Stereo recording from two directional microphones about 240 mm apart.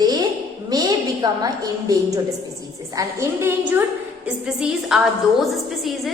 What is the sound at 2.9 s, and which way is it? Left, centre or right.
A woman's voice, centre.